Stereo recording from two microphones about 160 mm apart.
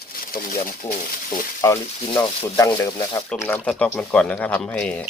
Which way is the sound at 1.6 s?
20° left (ahead or behind).